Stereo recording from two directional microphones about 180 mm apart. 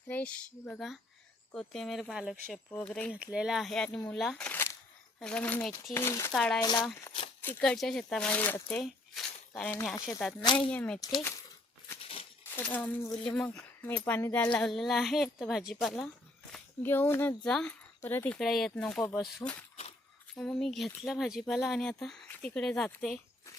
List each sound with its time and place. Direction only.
0.1 s speech: 5° left (ahead or behind)
6.3 s speech: 5° left (ahead or behind)
10.4 s speech: 30° left (ahead or behind)
10.7 s speech: 5° left (ahead or behind)
11.0 s speech: 15° left (ahead or behind)
12.5 s speech: 10° left (ahead or behind)
18.3 s speech: centre (ahead or behind)